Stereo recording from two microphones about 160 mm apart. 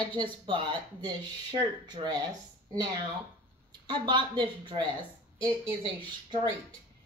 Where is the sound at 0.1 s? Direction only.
30° right (ahead or behind).